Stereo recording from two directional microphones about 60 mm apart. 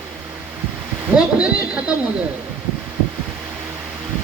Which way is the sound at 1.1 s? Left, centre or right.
Centre.